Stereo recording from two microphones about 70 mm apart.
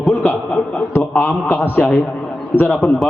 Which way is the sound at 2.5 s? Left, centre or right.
Left.